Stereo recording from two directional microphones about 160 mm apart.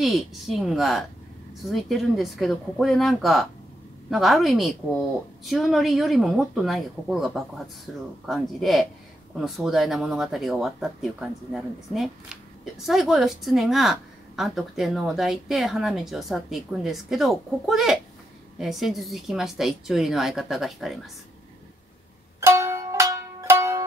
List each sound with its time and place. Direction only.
0.0 s speech: centre (ahead or behind)
22.4 s music: 15° right (ahead or behind)